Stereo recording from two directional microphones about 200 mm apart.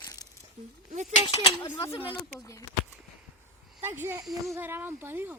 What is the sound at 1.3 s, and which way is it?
Speech, 15° left (ahead or behind).